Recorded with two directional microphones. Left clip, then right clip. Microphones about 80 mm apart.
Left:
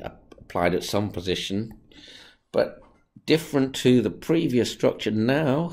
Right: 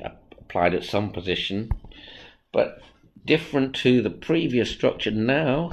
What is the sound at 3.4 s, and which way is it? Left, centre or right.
Speech, left.